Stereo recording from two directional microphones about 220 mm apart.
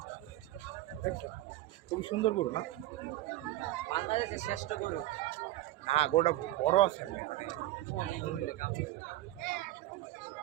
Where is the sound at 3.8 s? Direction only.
30° left (ahead or behind).